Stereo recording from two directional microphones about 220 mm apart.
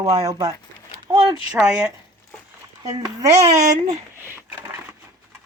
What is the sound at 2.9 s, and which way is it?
Speech, 15° right (ahead or behind).